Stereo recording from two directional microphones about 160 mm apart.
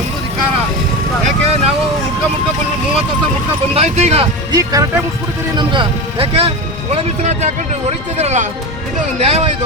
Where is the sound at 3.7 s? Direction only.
45° right (ahead or behind).